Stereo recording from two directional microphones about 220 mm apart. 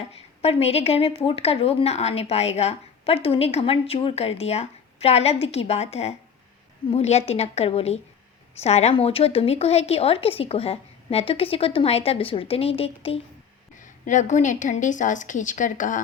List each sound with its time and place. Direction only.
0.4 s a woman's voice: 25° left (ahead or behind)